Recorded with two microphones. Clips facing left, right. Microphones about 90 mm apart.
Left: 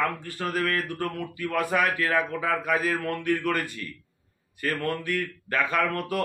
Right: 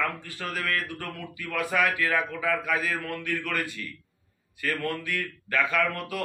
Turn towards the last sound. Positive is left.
turn(degrees=45)  # may be behind; listen again after turning